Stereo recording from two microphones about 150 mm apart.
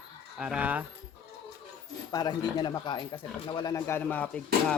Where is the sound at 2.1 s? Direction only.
25° left (ahead or behind).